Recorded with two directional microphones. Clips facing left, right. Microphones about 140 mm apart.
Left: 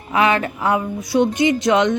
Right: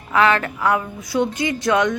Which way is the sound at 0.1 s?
20° left (ahead or behind).